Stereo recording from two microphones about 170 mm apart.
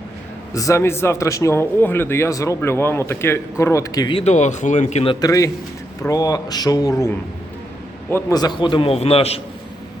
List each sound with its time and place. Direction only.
0.5 s a man's voice: 20° left (ahead or behind)
4.2 s speech: 45° left (ahead or behind)
5.2 s speech: 20° left (ahead or behind)
8.1 s a man's voice: 25° left (ahead or behind)